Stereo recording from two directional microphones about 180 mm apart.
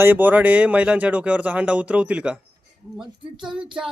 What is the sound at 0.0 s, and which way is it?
A child's voice, 10° right (ahead or behind).